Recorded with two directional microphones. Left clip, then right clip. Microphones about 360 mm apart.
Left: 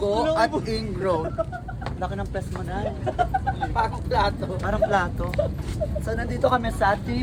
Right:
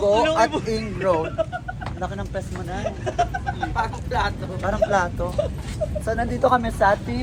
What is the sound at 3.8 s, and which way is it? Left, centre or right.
Speech, centre.